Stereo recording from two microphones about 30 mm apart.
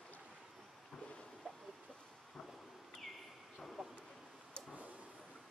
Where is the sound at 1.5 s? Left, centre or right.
Left.